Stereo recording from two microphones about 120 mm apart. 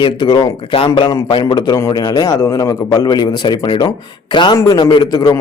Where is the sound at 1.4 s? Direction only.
35° left (ahead or behind).